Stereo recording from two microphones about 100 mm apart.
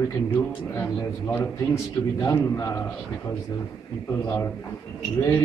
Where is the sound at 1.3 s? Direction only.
25° left (ahead or behind).